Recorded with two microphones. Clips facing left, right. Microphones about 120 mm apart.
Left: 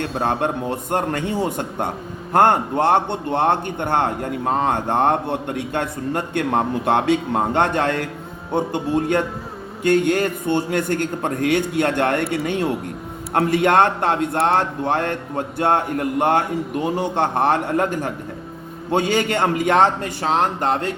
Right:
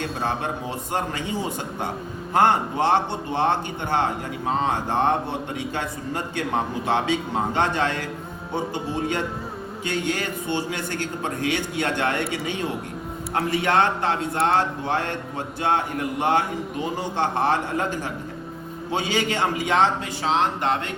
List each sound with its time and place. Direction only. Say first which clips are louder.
0.0 s a man's voice: left 5 dB; 55° left (ahead or behind)